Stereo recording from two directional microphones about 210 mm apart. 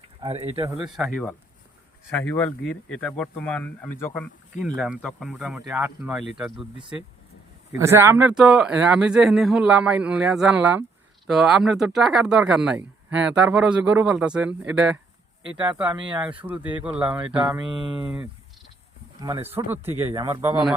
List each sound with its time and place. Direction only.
0.2 s speech: 25° right (ahead or behind)
0.6 s speech: 5° right (ahead or behind)
7.7 s speech: 10° right (ahead or behind)
15.5 s speech: 20° right (ahead or behind)
16.8 s speech: 5° right (ahead or behind)
19.2 s speech: 20° right (ahead or behind)
19.5 s speech: 10° right (ahead or behind)